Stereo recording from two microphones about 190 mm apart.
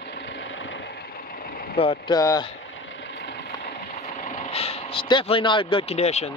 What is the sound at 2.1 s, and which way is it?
Speech, 20° left (ahead or behind).